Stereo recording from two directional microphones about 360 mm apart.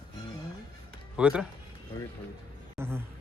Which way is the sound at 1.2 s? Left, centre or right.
Centre.